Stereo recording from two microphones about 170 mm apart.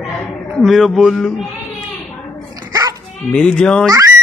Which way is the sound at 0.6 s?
Centre (ahead or behind).